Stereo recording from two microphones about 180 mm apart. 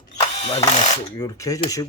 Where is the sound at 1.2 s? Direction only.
15° left (ahead or behind).